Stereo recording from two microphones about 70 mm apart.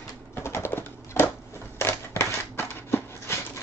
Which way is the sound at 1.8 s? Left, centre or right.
Left.